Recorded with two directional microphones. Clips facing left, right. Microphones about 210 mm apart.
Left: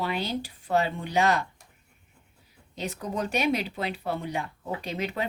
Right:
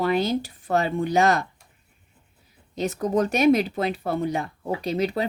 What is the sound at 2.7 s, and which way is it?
Speech, 45° right (ahead or behind).